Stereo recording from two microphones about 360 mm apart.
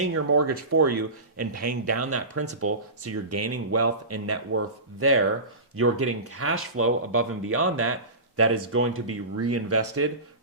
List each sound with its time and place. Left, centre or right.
0.0 s speech: right